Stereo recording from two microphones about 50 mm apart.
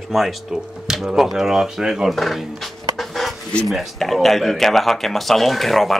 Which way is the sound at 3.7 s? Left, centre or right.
Centre.